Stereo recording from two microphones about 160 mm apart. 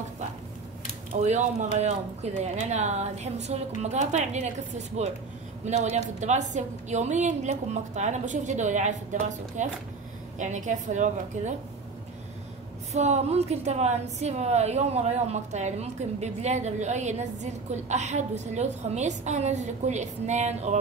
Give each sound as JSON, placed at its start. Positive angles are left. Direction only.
{"t": 1.2, "sound": "a woman's voice", "side_deg": -45}
{"t": 12.9, "sound": "a woman's voice", "side_deg": -45}